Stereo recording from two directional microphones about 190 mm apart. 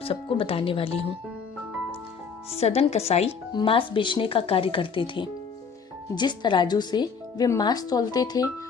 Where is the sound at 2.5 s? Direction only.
35° left (ahead or behind).